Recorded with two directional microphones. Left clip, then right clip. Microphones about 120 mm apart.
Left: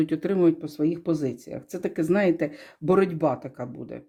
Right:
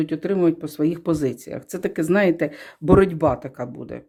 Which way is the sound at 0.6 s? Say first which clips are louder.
Right 3 dB; 35° right (ahead or behind).